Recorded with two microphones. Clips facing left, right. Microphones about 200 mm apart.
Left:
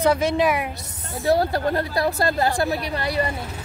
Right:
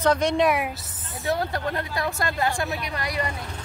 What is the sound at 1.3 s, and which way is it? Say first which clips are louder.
Speech: left 6 dB; 35° left (ahead or behind).